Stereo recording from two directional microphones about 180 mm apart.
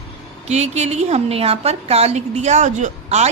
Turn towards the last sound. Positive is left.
turn(degrees=-40)  # may be behind; listen again after turning